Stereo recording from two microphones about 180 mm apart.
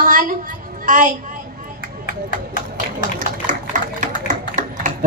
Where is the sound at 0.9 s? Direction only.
50° right (ahead or behind).